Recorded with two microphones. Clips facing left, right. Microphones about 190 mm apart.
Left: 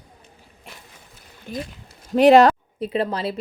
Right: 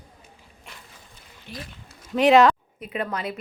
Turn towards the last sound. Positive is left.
turn(degrees=30)  # may be behind; listen again after turning